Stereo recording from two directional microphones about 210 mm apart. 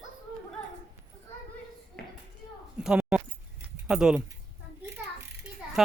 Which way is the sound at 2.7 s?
5° right (ahead or behind).